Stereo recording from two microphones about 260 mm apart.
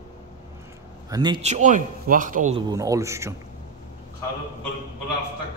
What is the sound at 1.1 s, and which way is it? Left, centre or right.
A man's voice, centre.